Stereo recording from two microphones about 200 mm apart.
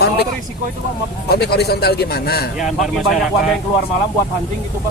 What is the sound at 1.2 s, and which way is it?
Speech, 55° left (ahead or behind).